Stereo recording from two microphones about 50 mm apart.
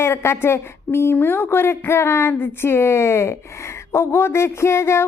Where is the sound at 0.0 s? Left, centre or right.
Left.